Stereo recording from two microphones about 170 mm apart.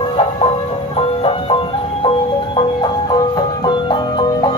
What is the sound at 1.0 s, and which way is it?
Music, 35° left (ahead or behind).